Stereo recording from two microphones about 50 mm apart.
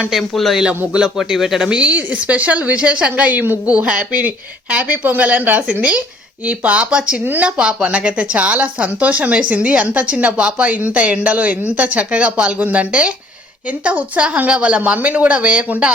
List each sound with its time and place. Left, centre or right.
0.1 s a man's voice: centre
0.9 s speech: centre
1.7 s a woman's voice: right